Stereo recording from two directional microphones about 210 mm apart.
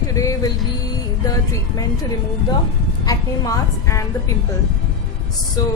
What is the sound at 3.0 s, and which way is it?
Speech, 15° left (ahead or behind).